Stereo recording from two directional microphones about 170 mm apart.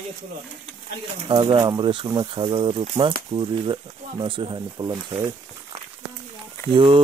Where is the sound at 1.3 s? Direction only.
30° right (ahead or behind).